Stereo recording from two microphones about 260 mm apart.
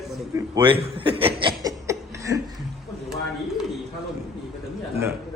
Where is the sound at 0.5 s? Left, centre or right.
Centre.